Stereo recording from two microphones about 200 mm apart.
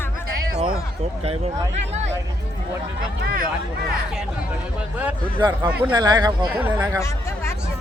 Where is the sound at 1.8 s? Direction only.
35° right (ahead or behind).